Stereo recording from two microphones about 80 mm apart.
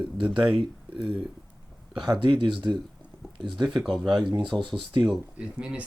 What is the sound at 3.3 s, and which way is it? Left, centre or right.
Speech, right.